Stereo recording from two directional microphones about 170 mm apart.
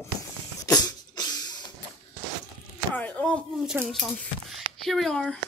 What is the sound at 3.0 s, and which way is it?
A woman's voice, 10° left (ahead or behind).